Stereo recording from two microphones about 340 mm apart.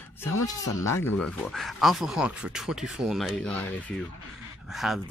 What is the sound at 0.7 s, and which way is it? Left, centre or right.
Speech, centre.